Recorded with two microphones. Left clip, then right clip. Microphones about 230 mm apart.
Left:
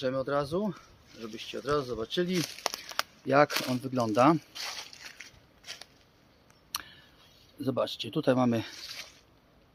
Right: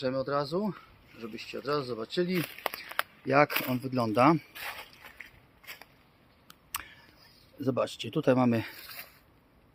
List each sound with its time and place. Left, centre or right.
0.0 s speech: centre
3.5 s speech: centre
3.8 s speech: centre
5.6 s a sound: centre
7.6 s speech: right